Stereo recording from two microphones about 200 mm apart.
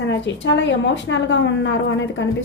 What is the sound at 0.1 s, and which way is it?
A woman's voice, 65° left (ahead or behind).